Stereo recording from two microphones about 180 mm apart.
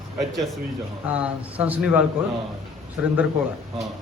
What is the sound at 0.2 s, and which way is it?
A man's voice, centre (ahead or behind).